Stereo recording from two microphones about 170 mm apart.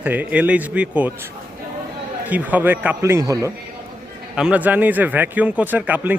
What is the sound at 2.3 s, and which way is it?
Speech, 10° right (ahead or behind).